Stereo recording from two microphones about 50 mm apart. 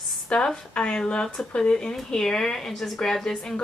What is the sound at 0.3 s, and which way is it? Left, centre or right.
Speech, centre.